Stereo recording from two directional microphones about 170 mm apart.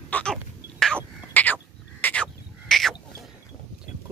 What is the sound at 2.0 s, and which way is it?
Bird, 5° left (ahead or behind).